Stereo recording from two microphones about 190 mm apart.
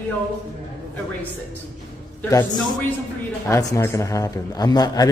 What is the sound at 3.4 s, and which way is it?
A man's voice, 15° left (ahead or behind).